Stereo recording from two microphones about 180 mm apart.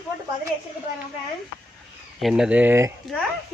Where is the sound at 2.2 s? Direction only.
Centre (ahead or behind).